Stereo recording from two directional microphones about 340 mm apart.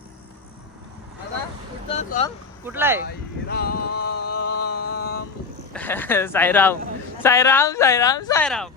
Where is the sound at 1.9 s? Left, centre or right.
Centre.